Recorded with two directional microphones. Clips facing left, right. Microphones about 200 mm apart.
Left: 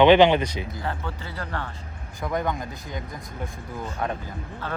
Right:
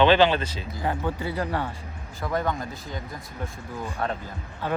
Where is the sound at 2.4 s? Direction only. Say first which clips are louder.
Even; 20° left (ahead or behind).